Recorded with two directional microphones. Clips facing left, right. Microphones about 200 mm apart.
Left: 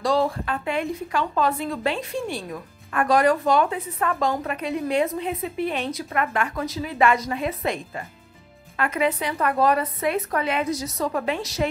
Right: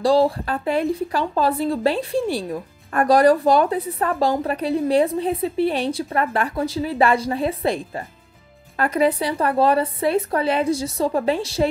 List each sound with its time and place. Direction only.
0.0 s a woman's voice: 30° right (ahead or behind)